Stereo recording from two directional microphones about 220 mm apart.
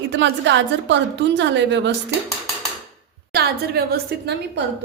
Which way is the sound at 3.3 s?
45° right (ahead or behind).